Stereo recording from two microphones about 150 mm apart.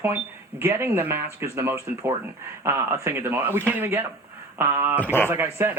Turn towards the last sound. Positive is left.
turn(degrees=-15)  # may be behind; listen again after turning